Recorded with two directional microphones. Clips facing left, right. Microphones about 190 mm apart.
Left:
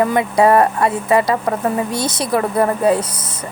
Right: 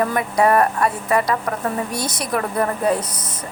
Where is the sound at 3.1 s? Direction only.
5° left (ahead or behind).